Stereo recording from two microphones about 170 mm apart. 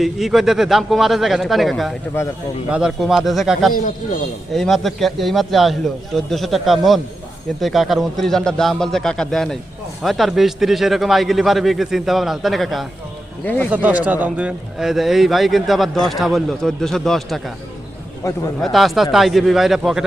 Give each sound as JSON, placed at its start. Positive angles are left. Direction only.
{"t": 0.0, "sound": "speech", "side_deg": 0}
{"t": 13.7, "sound": "speech", "side_deg": -10}
{"t": 18.2, "sound": "speech", "side_deg": 20}
{"t": 18.6, "sound": "speech", "side_deg": 0}